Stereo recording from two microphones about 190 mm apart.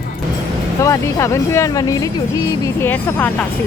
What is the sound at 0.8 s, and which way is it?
Speech, 15° left (ahead or behind).